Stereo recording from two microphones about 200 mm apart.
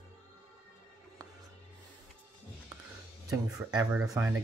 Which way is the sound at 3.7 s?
20° right (ahead or behind).